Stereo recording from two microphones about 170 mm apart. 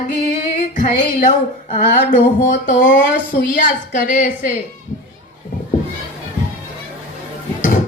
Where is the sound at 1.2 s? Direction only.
50° left (ahead or behind).